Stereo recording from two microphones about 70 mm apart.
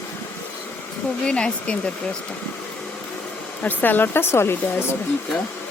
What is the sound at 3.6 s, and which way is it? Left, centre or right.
Speech, left.